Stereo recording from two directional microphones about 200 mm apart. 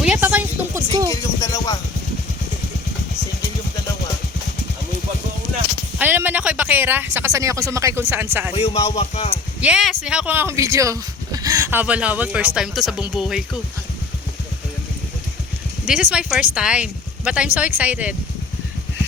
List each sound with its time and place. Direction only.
0.0 s a sound: 5° right (ahead or behind)
1.4 s speech: 15° left (ahead or behind)
6.0 s speech: 10° right (ahead or behind)
8.5 s speech: 30° left (ahead or behind)
9.6 s speech: 5° right (ahead or behind)
15.9 s speech: 5° right (ahead or behind)